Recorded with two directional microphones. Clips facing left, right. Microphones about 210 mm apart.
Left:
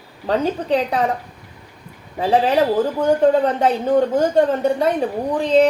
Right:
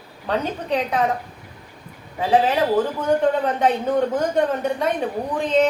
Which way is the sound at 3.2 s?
35° left (ahead or behind).